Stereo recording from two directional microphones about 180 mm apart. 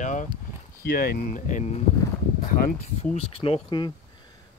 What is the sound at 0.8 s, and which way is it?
Speech, 55° left (ahead or behind).